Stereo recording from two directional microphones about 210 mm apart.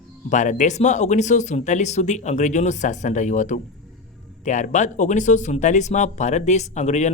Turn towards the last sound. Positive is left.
turn(degrees=35)  # may be behind; listen again after turning